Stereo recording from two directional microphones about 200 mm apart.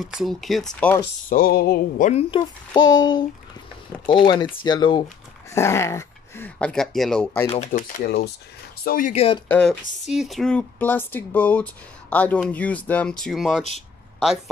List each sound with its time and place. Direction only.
0.0 s speech: centre (ahead or behind)
1.3 s a sound: 50° left (ahead or behind)
2.3 s child singing: 20° left (ahead or behind)
5.5 s speech: 15° left (ahead or behind)
7.4 s speech: 30° left (ahead or behind)
8.0 s a sound: 55° left (ahead or behind)
9.1 s child singing: 30° left (ahead or behind)
9.5 s speech: 5° left (ahead or behind)